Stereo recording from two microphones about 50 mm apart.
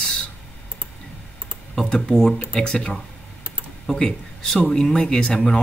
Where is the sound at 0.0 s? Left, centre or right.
Centre.